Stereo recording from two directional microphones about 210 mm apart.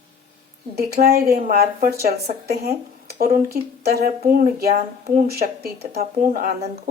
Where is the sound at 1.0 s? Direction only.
50° right (ahead or behind).